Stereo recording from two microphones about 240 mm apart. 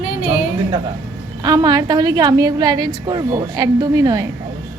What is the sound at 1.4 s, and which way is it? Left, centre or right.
A woman's voice, centre.